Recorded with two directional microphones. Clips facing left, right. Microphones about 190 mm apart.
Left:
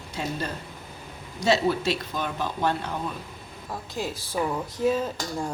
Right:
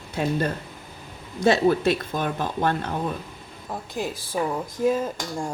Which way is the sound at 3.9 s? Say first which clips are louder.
Right 2 dB; 15° right (ahead or behind).